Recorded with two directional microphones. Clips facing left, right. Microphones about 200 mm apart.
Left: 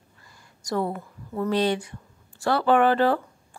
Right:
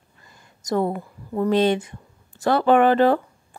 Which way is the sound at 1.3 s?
25° right (ahead or behind).